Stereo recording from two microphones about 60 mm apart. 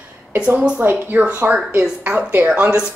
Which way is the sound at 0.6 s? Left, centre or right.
Right.